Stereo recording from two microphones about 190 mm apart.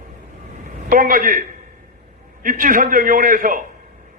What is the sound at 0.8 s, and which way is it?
A man's voice, 45° right (ahead or behind).